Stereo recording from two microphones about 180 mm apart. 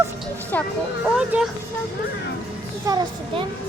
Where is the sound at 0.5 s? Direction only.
10° left (ahead or behind).